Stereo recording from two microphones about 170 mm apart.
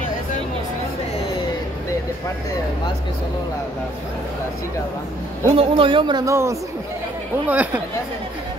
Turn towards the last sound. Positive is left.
turn(degrees=-10)  # may be behind; listen again after turning